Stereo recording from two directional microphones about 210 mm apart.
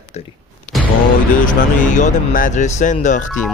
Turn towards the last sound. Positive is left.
turn(degrees=35)  # may be behind; listen again after turning